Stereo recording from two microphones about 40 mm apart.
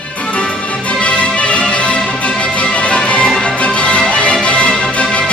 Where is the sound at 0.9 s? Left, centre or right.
Left.